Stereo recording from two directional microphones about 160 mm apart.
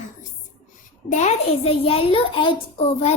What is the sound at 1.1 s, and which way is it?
A child's voice, 45° left (ahead or behind).